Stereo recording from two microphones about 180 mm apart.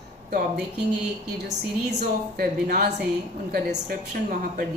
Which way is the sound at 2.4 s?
60° right (ahead or behind).